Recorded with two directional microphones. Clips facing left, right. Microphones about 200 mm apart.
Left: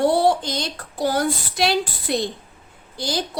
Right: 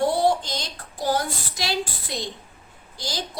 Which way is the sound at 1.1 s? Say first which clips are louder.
Left 2 dB; 60° left (ahead or behind).